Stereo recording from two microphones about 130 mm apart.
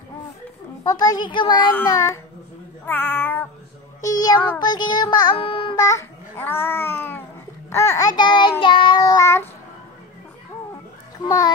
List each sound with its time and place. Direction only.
0.8 s child singing: 30° left (ahead or behind)
1.9 s a child's voice: 25° left (ahead or behind)
4.0 s child singing: 30° left (ahead or behind)
5.8 s a child's voice: 25° left (ahead or behind)
7.7 s child singing: 25° left (ahead or behind)
11.2 s a child's voice: 25° left (ahead or behind)